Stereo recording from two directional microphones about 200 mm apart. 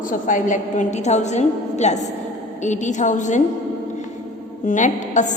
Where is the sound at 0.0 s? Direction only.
40° left (ahead or behind).